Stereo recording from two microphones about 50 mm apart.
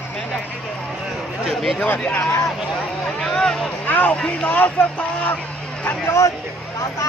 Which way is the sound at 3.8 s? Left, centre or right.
Left.